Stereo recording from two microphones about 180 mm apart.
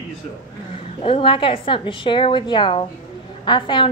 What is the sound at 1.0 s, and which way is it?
A woman's voice, 30° left (ahead or behind).